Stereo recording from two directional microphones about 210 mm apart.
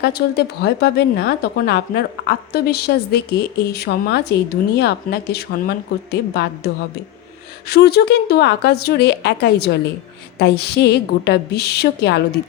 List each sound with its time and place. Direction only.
0.0 s a woman's voice: 50° left (ahead or behind)
7.7 s a woman's voice: 50° left (ahead or behind)